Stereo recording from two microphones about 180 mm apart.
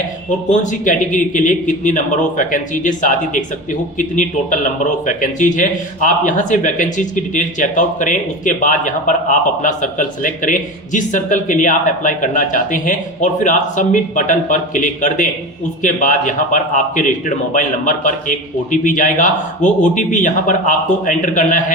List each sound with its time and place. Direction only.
0.3 s a man's voice: 45° left (ahead or behind)